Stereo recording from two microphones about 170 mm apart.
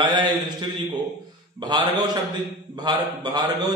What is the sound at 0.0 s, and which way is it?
A man's voice, 25° right (ahead or behind).